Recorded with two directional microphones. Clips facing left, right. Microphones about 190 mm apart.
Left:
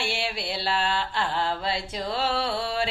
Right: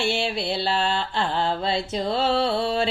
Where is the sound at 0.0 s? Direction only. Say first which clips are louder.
Right 5 dB; 25° right (ahead or behind).